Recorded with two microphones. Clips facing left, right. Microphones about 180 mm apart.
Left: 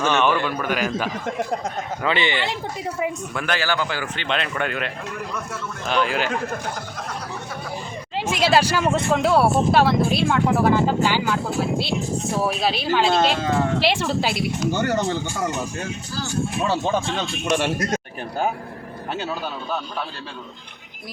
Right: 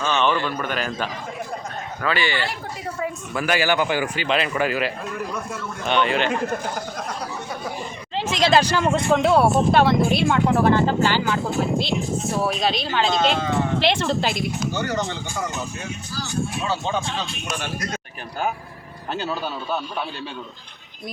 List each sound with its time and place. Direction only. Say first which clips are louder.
0.0 s a woman's voice: left 2 dB; 10° left (ahead or behind)
2.0 s speech: even; 20° left (ahead or behind)
3.3 s speech: right 6 dB; 10° right (ahead or behind)
8.1 s speech: even; 10° left (ahead or behind)
12.5 s a woman's voice: left 1 dB; 5° left (ahead or behind)
17.9 s a sound: left 5 dB; 35° left (ahead or behind)